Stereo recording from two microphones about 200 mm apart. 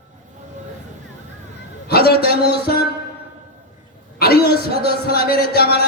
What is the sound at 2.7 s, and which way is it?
Music, 50° left (ahead or behind).